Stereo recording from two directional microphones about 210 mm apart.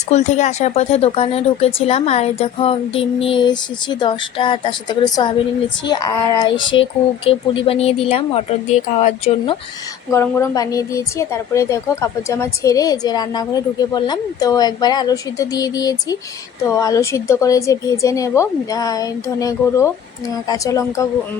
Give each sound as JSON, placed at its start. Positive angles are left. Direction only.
{"t": 0.1, "sound": "speech", "side_deg": 35}
{"t": 10.1, "sound": "a woman's voice", "side_deg": 15}